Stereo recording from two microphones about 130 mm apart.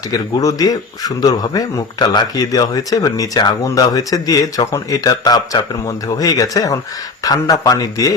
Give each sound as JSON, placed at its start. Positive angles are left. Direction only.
{"t": 0.1, "sound": "speech", "side_deg": 30}